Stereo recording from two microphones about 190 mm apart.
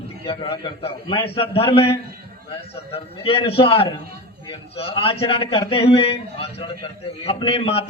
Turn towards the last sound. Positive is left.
turn(degrees=30)  # may be behind; listen again after turning